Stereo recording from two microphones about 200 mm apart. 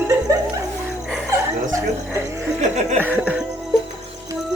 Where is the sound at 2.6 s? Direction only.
35° right (ahead or behind).